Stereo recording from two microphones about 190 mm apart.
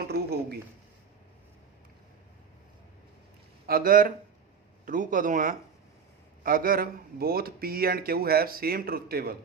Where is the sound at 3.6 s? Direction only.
50° right (ahead or behind).